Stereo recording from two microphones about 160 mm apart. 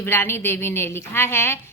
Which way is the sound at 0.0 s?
15° left (ahead or behind).